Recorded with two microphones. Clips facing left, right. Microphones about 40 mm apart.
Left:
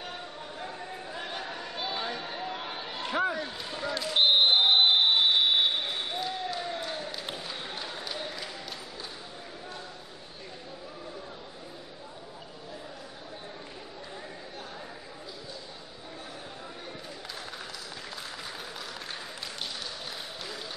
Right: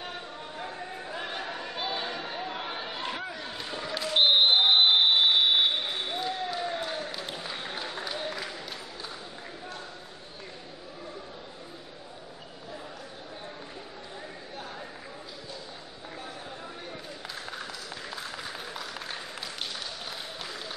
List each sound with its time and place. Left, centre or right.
0.6 s chatter: centre
3.3 s basketball bounce: centre